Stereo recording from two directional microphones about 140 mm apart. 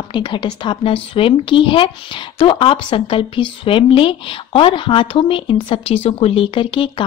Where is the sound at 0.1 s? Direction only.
35° left (ahead or behind).